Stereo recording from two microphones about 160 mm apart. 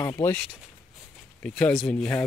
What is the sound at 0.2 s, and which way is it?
Speech, 10° left (ahead or behind).